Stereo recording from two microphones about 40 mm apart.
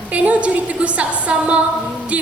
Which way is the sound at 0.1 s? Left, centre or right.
Right.